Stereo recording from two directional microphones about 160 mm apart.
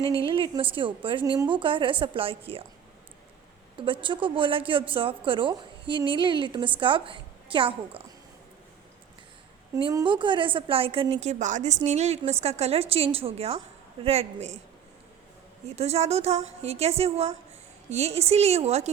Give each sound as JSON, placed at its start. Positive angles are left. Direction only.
{"t": 0.0, "sound": "a woman's voice", "side_deg": 20}
{"t": 0.3, "sound": "a woman's voice", "side_deg": -30}
{"t": 3.8, "sound": "a woman's voice", "side_deg": -30}
{"t": 9.9, "sound": "a woman's voice", "side_deg": -30}
{"t": 15.7, "sound": "a woman's voice", "side_deg": -40}